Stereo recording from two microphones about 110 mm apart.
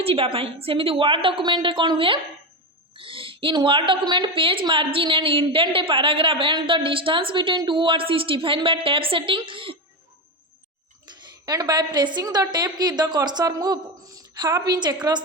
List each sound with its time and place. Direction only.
0.0 s a woman's voice: 60° right (ahead or behind)
11.4 s a woman's voice: 35° right (ahead or behind)